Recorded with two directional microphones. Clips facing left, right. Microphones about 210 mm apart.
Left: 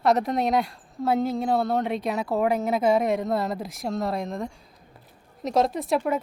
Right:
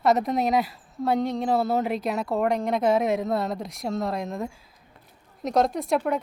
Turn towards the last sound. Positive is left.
turn(degrees=0)  # may be behind; listen again after turning